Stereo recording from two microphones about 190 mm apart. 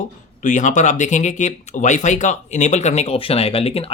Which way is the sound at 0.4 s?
40° left (ahead or behind).